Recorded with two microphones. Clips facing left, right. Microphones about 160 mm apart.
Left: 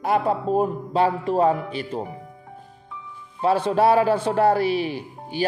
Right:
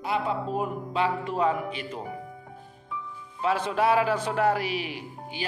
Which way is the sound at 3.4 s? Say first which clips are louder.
Left 6 dB; 30° left (ahead or behind).